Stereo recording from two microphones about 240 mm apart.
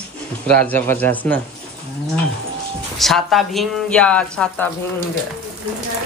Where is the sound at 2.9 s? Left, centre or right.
Centre.